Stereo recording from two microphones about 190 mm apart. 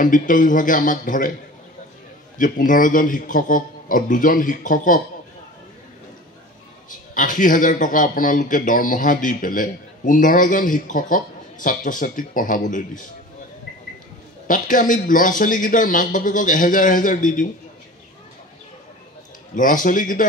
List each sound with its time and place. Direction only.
0.0 s speech: 45° left (ahead or behind)
2.3 s speech: 45° left (ahead or behind)
6.9 s speech: 45° left (ahead or behind)
14.5 s speech: 45° left (ahead or behind)
19.5 s speech: 45° left (ahead or behind)